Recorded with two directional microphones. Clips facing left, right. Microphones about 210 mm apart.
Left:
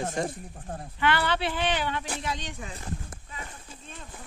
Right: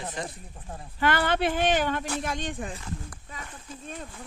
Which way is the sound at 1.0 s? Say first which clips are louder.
Right 2 dB; 45° right (ahead or behind).